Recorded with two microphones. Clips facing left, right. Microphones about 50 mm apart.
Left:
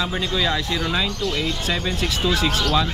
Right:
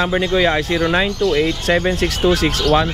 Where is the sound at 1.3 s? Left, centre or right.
Right.